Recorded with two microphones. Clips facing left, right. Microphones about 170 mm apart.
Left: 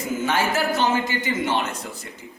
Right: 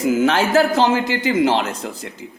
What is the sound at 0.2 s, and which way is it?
A man's voice, 90° right.